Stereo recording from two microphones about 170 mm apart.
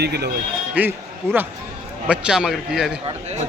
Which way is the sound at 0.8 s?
10° right (ahead or behind).